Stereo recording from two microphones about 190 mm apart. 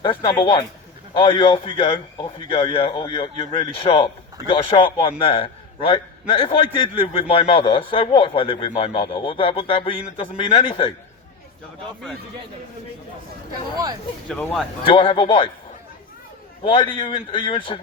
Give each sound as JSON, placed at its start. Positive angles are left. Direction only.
{"t": 0.0, "sound": "speech", "side_deg": 25}
{"t": 14.3, "sound": "speech", "side_deg": 5}
{"t": 14.8, "sound": "speech", "side_deg": 25}
{"t": 16.6, "sound": "speech", "side_deg": 25}